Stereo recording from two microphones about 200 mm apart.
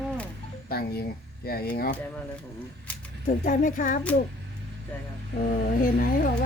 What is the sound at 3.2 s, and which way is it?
Speech, 40° left (ahead or behind).